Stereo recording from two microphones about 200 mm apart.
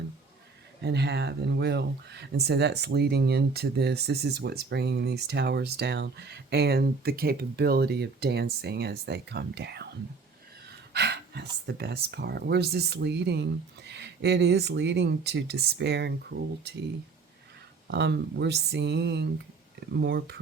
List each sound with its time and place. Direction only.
0.8 s speech: 55° right (ahead or behind)
10.9 s speech: 55° right (ahead or behind)
17.9 s speech: 60° right (ahead or behind)